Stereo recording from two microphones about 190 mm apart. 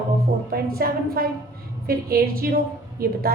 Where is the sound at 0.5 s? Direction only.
50° right (ahead or behind).